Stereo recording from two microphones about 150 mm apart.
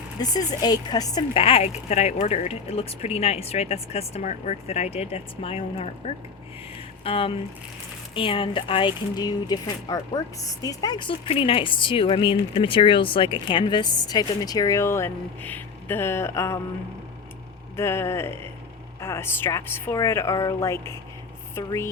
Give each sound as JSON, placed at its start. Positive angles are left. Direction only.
{"t": 0.2, "sound": "a woman's voice", "side_deg": 25}
{"t": 1.3, "sound": "speech", "side_deg": 40}
{"t": 17.7, "sound": "a woman's voice", "side_deg": 15}